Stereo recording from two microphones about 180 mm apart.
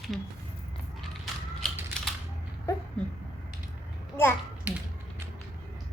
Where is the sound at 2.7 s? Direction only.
15° left (ahead or behind).